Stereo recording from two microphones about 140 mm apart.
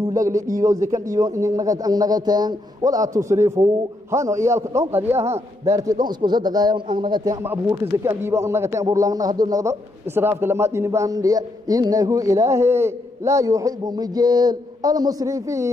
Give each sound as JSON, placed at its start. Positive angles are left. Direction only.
{"t": 0.1, "sound": "a sound", "side_deg": -25}
{"t": 0.6, "sound": "a man's voice", "side_deg": -25}
{"t": 7.7, "sound": "speech", "side_deg": -20}